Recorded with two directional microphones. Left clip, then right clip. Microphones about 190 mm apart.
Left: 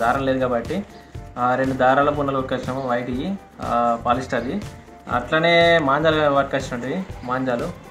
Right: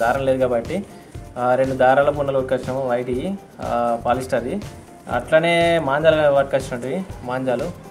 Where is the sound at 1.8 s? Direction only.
30° right (ahead or behind).